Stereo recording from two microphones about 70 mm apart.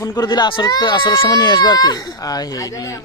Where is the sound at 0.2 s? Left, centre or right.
Left.